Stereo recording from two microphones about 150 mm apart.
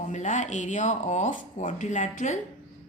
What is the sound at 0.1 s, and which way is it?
A woman's voice, 55° left (ahead or behind).